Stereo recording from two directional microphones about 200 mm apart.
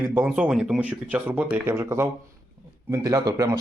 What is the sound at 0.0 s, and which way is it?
Speech, 10° right (ahead or behind).